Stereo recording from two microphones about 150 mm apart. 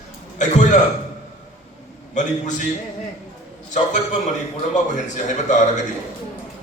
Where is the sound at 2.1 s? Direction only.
55° left (ahead or behind).